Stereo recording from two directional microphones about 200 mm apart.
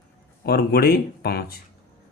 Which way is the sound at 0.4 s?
50° left (ahead or behind).